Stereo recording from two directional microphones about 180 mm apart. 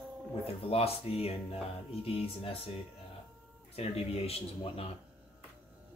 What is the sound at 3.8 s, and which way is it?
Speech, 35° left (ahead or behind).